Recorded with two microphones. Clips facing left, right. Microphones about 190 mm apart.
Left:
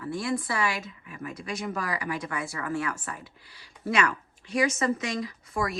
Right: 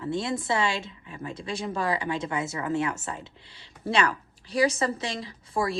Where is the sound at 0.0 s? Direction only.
25° right (ahead or behind).